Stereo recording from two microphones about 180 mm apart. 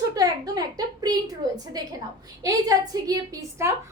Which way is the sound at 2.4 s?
20° right (ahead or behind).